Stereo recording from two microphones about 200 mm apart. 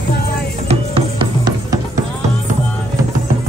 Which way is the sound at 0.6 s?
25° right (ahead or behind).